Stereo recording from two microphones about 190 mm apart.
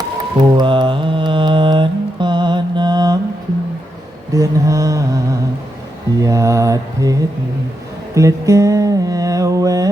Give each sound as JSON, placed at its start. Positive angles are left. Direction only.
{"t": 0.3, "sound": "mantra", "side_deg": -25}
{"t": 4.4, "sound": "mantra", "side_deg": -15}